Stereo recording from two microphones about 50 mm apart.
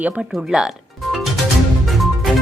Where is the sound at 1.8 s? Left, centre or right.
Centre.